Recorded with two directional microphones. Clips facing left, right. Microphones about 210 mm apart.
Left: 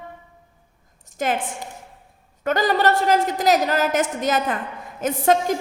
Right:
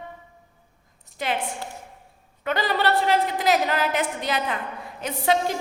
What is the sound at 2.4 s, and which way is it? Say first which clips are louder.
A woman's voice: left 4 dB; 45° left (ahead or behind).